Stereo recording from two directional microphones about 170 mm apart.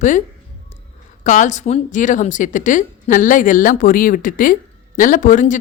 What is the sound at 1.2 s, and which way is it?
Speech, 45° left (ahead or behind).